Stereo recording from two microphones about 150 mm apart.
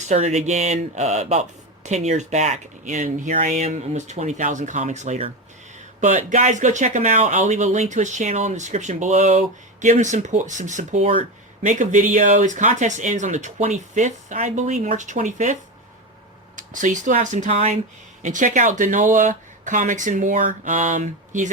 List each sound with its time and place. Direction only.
0.0 s speech: 50° right (ahead or behind)
16.6 s speech: 60° right (ahead or behind)